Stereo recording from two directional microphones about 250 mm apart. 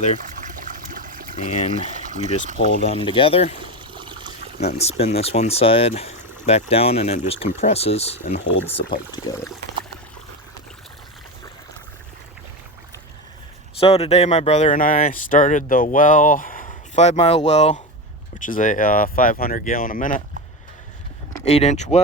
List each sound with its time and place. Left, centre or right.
0.3 s trickle: right
1.4 s speech: left
3.6 s trickle: centre
4.6 s speech: left
13.7 s speech: left
21.4 s speech: left